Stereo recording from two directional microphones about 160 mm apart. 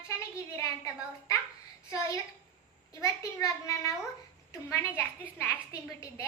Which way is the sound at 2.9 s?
20° left (ahead or behind).